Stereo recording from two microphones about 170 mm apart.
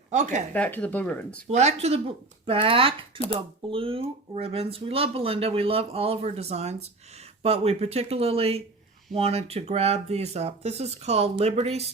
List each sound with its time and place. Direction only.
0.1 s speech: 45° right (ahead or behind)
0.5 s speech: 10° left (ahead or behind)
1.5 s speech: 40° right (ahead or behind)